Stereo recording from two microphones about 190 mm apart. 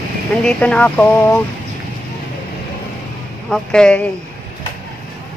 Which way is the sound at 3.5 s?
5° left (ahead or behind).